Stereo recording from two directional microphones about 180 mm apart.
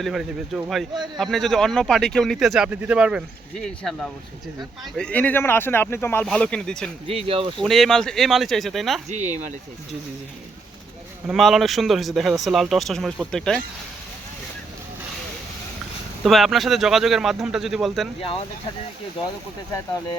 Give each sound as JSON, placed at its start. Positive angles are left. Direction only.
{"t": 0.0, "sound": "speech", "side_deg": 0}
{"t": 7.1, "sound": "speech", "side_deg": -30}
{"t": 7.6, "sound": "speech", "side_deg": 0}
{"t": 9.0, "sound": "speech", "side_deg": -40}
{"t": 11.3, "sound": "speech", "side_deg": 0}
{"t": 16.2, "sound": "speech", "side_deg": 0}